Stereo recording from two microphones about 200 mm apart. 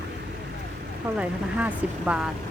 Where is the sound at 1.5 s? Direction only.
5° right (ahead or behind).